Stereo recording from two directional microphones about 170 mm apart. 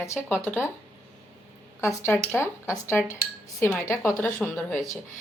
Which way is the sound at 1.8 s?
15° left (ahead or behind).